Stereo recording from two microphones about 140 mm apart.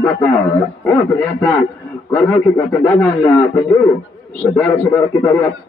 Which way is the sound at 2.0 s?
15° left (ahead or behind).